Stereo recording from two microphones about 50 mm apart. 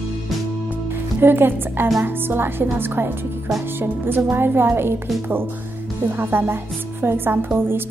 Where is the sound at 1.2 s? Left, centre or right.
Right.